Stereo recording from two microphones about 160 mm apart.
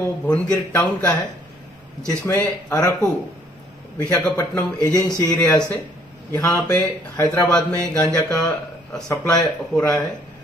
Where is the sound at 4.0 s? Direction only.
15° left (ahead or behind).